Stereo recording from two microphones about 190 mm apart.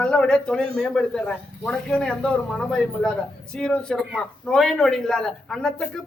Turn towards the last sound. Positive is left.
turn(degrees=0)  # may be behind; listen again after turning